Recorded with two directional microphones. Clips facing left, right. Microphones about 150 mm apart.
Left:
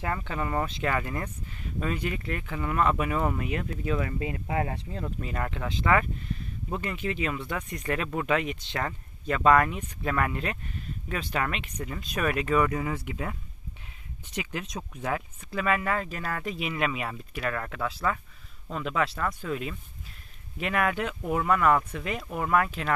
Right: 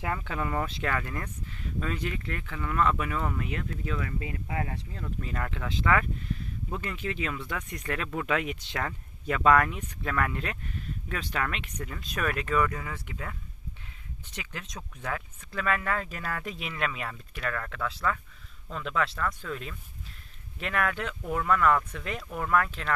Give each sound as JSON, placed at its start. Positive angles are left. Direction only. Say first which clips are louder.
{"t": 0.0, "sound": "speech", "louder": "left 1 dB", "side_deg": -5}
{"t": 5.2, "sound": "speech", "louder": "left 1 dB", "side_deg": 10}